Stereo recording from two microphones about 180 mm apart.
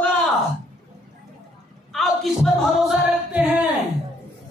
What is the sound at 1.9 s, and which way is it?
Music, centre (ahead or behind).